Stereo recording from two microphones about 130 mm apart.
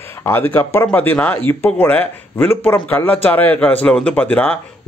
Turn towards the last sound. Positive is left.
turn(degrees=10)  # may be behind; listen again after turning